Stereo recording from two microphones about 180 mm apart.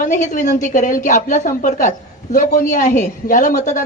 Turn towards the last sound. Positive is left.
turn(degrees=45)  # may be behind; listen again after turning